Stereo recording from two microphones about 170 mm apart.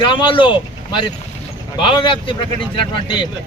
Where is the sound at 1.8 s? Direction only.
30° left (ahead or behind).